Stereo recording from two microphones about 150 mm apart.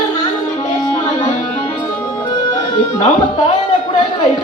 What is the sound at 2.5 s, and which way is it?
Music, 40° left (ahead or behind).